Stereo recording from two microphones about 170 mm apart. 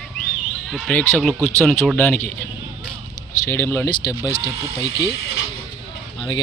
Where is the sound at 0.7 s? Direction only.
5° left (ahead or behind).